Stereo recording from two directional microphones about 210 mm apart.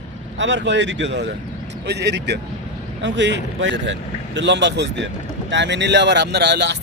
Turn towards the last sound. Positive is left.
turn(degrees=-55)  # may be behind; listen again after turning